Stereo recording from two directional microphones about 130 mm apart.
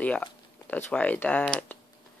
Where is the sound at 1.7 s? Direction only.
15° left (ahead or behind).